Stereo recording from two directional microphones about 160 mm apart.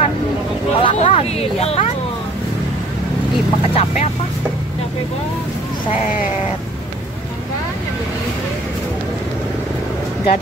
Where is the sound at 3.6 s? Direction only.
40° left (ahead or behind).